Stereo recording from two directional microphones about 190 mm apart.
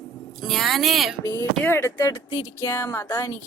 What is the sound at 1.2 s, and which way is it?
Speech, 15° left (ahead or behind).